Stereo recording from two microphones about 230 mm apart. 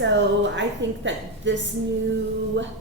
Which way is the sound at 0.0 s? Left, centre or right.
Right.